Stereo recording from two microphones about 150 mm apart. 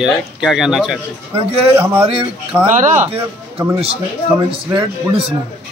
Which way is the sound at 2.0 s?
40° right (ahead or behind).